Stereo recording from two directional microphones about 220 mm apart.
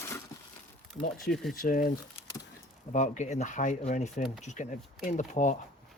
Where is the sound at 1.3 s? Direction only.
Centre (ahead or behind).